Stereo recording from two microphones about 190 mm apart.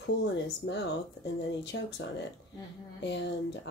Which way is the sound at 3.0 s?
65° left (ahead or behind).